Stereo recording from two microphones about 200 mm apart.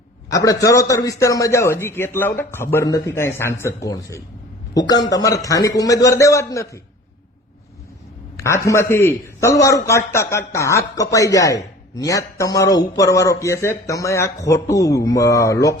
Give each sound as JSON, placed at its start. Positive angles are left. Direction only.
{"t": 0.3, "sound": "a man's voice", "side_deg": 15}
{"t": 8.4, "sound": "a man's voice", "side_deg": 15}